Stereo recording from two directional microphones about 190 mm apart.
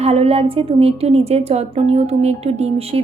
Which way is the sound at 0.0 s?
35° right (ahead or behind).